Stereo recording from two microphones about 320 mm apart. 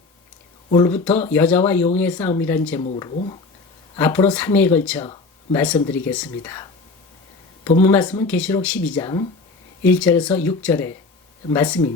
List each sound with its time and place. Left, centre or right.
0.7 s speech: centre
2.8 s speech: centre
3.9 s speech: centre
7.8 s speech: centre